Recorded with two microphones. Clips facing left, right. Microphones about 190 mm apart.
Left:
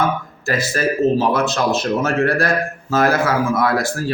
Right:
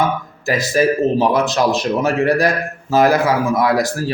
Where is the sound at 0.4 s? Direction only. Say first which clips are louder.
Right 4 dB; 15° right (ahead or behind).